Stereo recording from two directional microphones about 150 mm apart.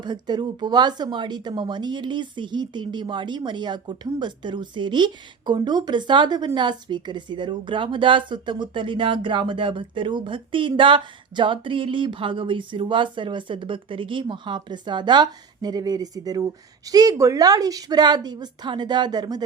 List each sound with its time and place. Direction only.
0.0 s speech: 30° right (ahead or behind)